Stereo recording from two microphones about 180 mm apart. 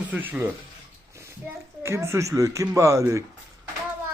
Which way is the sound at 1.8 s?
15° right (ahead or behind).